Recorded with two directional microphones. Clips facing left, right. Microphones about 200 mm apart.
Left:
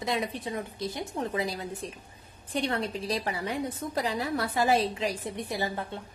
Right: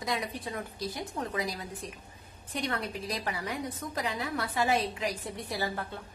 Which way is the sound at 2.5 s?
30° left (ahead or behind).